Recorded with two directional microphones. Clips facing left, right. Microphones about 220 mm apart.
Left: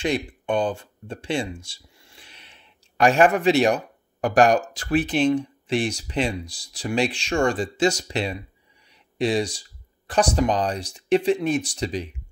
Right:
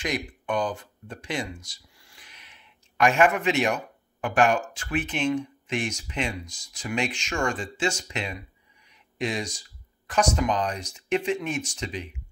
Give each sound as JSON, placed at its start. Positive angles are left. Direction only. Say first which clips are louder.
{"t": 0.0, "sound": "speech", "louder": "left 5 dB", "side_deg": 30}